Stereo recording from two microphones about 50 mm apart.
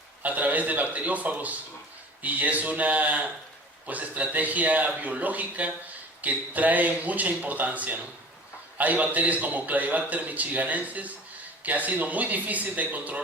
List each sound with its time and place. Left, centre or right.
0.2 s a man's voice: right